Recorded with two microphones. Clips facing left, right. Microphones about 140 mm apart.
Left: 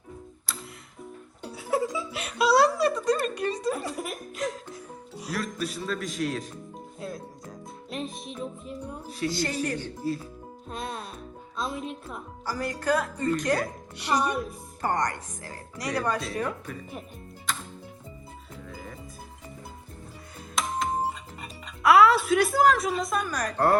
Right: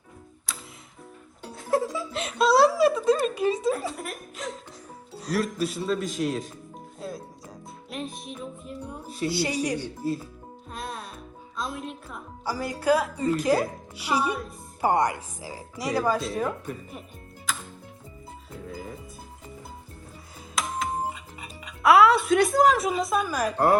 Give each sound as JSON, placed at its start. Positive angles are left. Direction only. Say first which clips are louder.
{"t": 1.4, "sound": "speech", "louder": "right 2 dB", "side_deg": 5}
{"t": 10.7, "sound": "music", "louder": "left 1 dB", "side_deg": 0}
{"t": 11.5, "sound": "speech", "louder": "left 1 dB", "side_deg": 0}
{"t": 17.5, "sound": "music", "louder": "even", "side_deg": 0}
{"t": 20.6, "sound": "music", "louder": "left 1 dB", "side_deg": 0}